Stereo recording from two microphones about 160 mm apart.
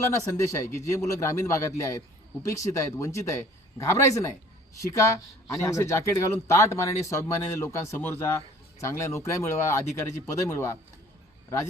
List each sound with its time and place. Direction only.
0.1 s speech: 20° left (ahead or behind)